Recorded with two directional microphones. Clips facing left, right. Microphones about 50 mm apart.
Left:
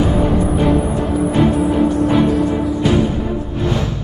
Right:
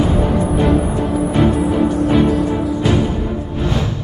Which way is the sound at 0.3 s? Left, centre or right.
Centre.